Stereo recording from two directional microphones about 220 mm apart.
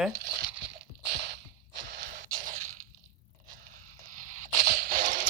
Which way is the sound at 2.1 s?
35° right (ahead or behind).